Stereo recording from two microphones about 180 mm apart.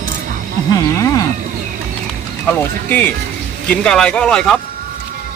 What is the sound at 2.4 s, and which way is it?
Speech, 10° left (ahead or behind).